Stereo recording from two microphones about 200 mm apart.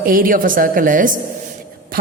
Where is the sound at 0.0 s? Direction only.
45° right (ahead or behind).